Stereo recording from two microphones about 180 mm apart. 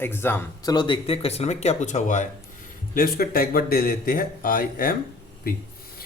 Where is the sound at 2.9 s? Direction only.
55° left (ahead or behind).